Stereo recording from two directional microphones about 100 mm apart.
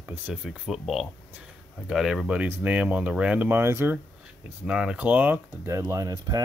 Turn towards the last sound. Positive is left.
turn(degrees=-40)  # may be behind; listen again after turning